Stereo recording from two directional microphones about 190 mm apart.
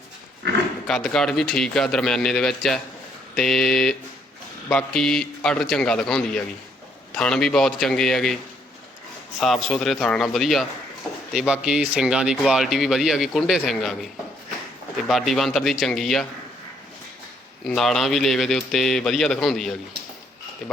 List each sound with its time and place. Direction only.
0.9 s speech: 5° left (ahead or behind)
9.4 s speech: centre (ahead or behind)
17.7 s speech: centre (ahead or behind)